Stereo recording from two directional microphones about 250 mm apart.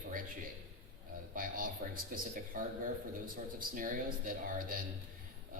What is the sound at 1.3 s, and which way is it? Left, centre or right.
A man's voice, right.